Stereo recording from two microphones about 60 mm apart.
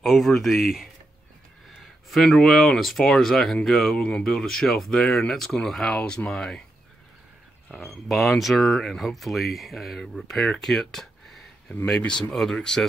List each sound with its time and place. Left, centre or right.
0.0 s speech: centre
2.0 s speech: centre
3.9 s speech: centre
4.2 s speech: centre
7.8 s speech: centre